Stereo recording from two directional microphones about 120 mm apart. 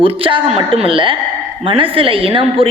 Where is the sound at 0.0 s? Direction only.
50° right (ahead or behind).